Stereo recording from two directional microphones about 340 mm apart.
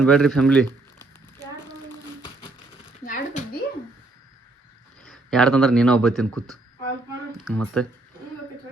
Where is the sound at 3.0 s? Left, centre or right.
Left.